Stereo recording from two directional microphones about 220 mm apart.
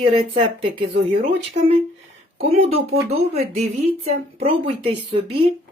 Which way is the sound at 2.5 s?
25° right (ahead or behind).